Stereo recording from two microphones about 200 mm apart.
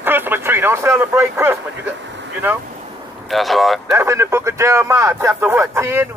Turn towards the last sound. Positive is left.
turn(degrees=-10)  # may be behind; listen again after turning